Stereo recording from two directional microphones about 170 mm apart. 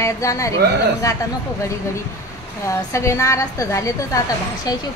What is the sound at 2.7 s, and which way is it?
A woman's voice, 15° left (ahead or behind).